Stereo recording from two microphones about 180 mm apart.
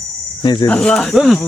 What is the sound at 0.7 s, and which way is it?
Speech, 5° left (ahead or behind).